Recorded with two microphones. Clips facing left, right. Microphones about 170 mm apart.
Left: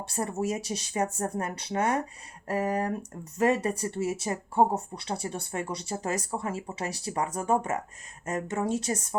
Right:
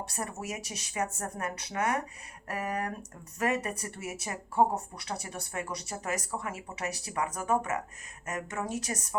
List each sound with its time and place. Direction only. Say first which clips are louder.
0.0 s speech: left 7 dB; 30° left (ahead or behind)